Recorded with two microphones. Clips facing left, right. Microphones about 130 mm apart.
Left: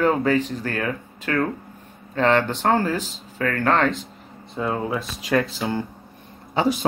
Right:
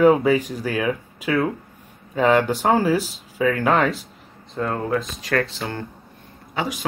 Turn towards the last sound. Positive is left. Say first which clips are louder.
# left 5 dB
turn(degrees=30)  # may be behind; listen again after turning